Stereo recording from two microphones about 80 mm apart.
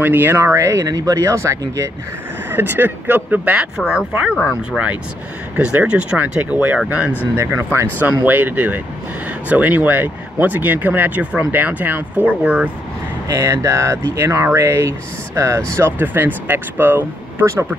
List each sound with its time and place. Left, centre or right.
0.0 s speech: right
0.4 s speech: right
0.8 s speech: right
2.5 s speech: right
3.7 s speech: centre
4.1 s speech: centre
5.6 s speech: centre
7.3 s speech: right; by 12.7 s centre
13.3 s speech: right